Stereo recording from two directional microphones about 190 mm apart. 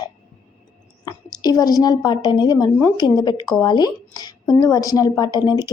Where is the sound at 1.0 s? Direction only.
20° left (ahead or behind).